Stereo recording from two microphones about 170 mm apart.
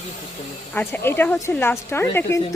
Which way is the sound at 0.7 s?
10° left (ahead or behind).